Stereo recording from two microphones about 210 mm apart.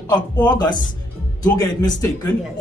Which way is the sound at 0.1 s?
20° left (ahead or behind).